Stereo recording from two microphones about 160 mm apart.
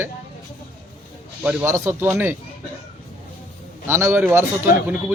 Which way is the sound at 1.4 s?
10° right (ahead or behind).